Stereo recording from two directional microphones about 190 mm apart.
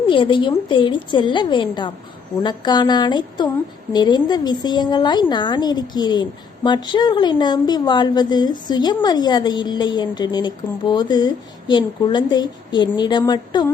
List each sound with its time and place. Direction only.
0.1 s a woman's voice: 25° left (ahead or behind)